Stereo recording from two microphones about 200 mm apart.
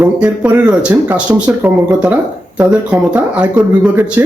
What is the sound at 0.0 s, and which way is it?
Speech, 10° right (ahead or behind).